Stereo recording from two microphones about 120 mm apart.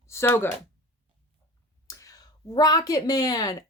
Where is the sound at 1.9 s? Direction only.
25° left (ahead or behind).